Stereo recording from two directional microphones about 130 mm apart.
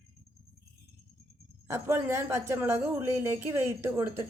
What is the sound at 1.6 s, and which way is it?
A man's voice, 20° right (ahead or behind).